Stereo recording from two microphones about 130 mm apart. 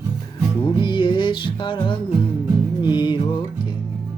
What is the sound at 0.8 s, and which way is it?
Music, 40° left (ahead or behind).